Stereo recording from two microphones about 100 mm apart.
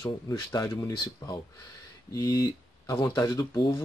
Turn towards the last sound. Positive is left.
turn(degrees=35)  # may be behind; listen again after turning